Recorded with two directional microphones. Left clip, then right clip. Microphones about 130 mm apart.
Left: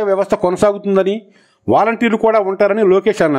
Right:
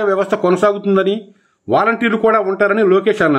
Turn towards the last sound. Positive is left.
turn(degrees=40)  # may be behind; listen again after turning